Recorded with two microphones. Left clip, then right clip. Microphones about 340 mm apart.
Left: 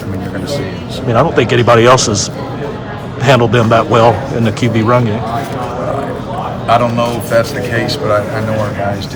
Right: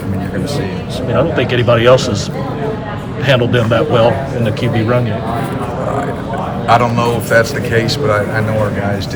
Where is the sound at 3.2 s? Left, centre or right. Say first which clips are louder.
Left 3 dB; centre.